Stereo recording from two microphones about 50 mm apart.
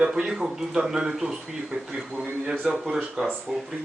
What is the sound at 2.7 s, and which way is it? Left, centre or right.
Speech, right.